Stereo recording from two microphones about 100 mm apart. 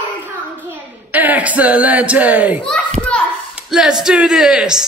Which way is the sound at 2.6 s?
10° left (ahead or behind).